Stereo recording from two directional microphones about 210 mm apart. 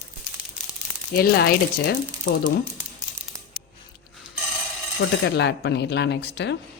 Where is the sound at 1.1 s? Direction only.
50° left (ahead or behind).